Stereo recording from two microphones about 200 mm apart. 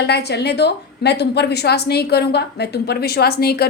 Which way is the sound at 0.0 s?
55° left (ahead or behind).